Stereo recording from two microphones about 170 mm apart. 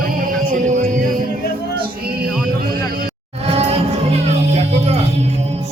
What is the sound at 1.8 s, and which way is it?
Music, 60° right (ahead or behind).